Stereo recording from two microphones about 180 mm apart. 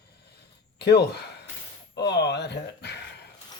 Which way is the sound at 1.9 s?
70° left (ahead or behind).